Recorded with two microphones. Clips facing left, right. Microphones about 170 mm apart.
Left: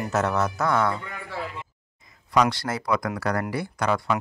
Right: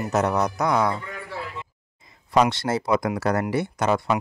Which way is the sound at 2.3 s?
25° right (ahead or behind).